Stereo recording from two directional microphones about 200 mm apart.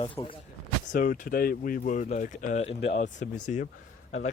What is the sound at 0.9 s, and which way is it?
Speech, 40° left (ahead or behind).